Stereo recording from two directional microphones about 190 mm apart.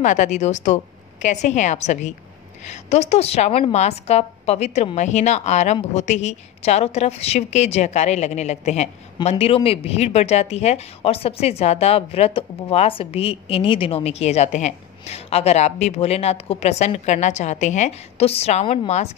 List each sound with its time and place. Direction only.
0.0 s a woman's voice: 40° left (ahead or behind)